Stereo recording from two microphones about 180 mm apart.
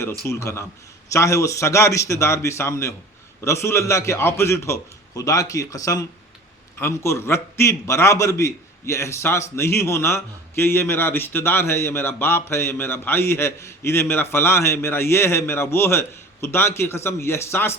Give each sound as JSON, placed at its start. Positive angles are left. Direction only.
{"t": 0.3, "sound": "a man's voice", "side_deg": 15}